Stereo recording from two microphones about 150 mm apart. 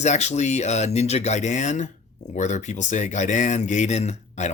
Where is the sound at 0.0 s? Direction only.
50° left (ahead or behind).